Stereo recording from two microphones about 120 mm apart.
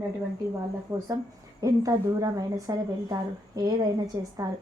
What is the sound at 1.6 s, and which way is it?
A woman's voice, 30° right (ahead or behind).